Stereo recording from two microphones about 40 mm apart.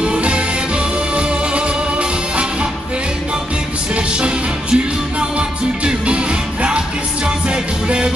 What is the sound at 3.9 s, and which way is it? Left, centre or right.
Music, right.